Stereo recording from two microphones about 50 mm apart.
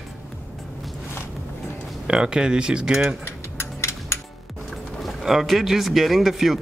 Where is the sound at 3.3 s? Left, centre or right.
Left.